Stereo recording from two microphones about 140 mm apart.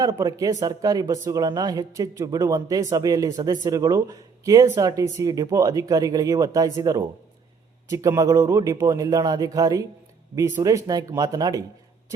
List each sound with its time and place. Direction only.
0.0 s speech: 25° right (ahead or behind)